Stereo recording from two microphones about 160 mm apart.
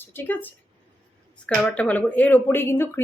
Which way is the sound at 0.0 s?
15° left (ahead or behind).